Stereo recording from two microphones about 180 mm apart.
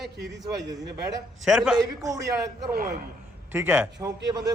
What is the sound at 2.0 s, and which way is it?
Speech, 20° right (ahead or behind).